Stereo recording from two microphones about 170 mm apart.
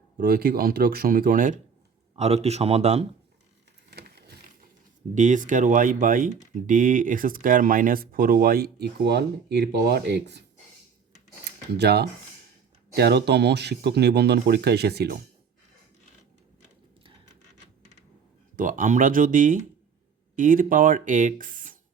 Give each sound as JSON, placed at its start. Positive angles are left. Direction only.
{"t": 0.2, "sound": "speech", "side_deg": -60}
{"t": 2.1, "sound": "speech", "side_deg": -40}
{"t": 3.9, "sound": "a sound", "side_deg": -75}
{"t": 5.1, "sound": "speech", "side_deg": -50}
{"t": 11.7, "sound": "speech", "side_deg": -70}
{"t": 18.5, "sound": "speech", "side_deg": -50}